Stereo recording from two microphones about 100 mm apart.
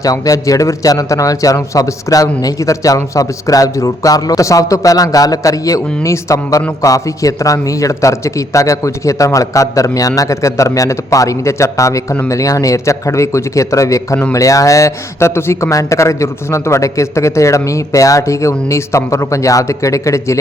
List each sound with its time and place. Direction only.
0.0 s a man's voice: 35° left (ahead or behind)